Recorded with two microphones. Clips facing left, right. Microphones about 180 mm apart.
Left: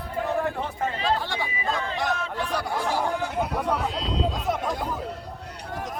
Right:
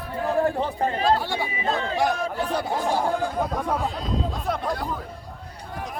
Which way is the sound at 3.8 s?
75° left (ahead or behind).